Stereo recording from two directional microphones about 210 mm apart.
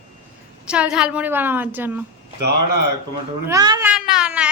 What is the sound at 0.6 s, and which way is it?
A woman's voice, 5° right (ahead or behind).